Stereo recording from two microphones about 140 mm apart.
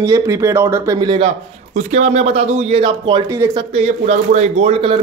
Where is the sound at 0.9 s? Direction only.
35° right (ahead or behind).